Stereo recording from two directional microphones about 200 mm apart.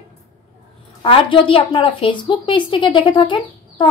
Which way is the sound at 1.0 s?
25° left (ahead or behind).